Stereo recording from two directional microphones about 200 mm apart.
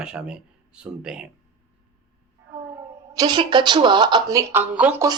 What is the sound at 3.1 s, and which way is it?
A woman's voice, 20° right (ahead or behind).